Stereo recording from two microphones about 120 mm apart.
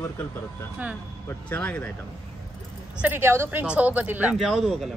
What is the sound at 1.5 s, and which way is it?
Speech, 10° left (ahead or behind).